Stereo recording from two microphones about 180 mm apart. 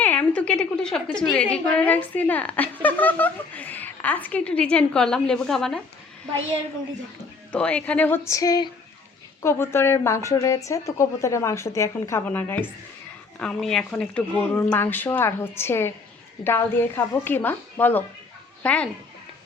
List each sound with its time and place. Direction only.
0.0 s a woman's voice: 10° left (ahead or behind)
7.5 s a woman's voice: 5° left (ahead or behind)